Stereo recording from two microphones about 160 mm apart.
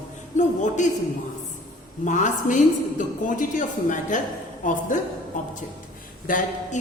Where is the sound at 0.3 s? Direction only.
50° left (ahead or behind).